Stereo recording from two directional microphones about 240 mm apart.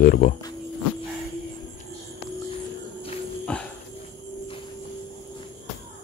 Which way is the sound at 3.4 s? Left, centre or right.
Centre.